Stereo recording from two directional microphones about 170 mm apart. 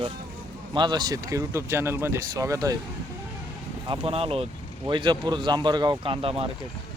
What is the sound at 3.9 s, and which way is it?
Speech, 35° right (ahead or behind).